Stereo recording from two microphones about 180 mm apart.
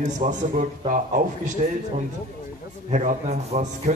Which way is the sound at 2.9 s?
40° right (ahead or behind).